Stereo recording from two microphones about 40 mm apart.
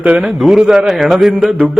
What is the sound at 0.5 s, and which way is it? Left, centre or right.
Mantra, centre.